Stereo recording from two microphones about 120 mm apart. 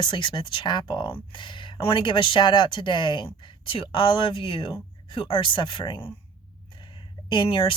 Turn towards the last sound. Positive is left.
turn(degrees=45)  # may be behind; listen again after turning